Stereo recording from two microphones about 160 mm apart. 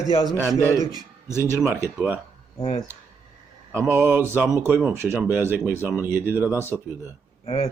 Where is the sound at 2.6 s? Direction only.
35° left (ahead or behind).